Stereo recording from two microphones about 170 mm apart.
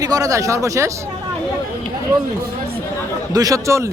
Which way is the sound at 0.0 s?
20° right (ahead or behind).